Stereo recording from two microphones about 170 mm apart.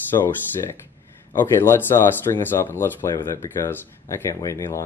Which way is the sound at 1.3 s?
15° left (ahead or behind).